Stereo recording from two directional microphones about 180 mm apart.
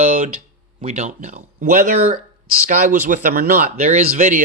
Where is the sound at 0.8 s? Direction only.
40° right (ahead or behind).